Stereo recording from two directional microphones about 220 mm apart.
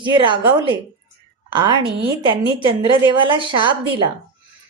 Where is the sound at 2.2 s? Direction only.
20° right (ahead or behind).